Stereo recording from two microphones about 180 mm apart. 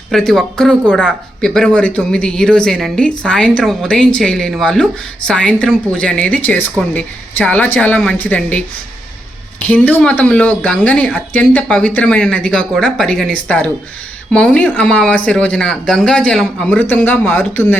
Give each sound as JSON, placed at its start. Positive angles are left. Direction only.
{"t": 0.1, "sound": "speech", "side_deg": 5}